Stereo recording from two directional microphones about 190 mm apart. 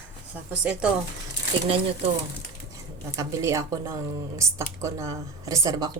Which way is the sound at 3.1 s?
15° right (ahead or behind).